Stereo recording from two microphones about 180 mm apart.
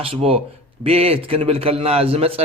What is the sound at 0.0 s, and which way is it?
A man's voice, 30° right (ahead or behind).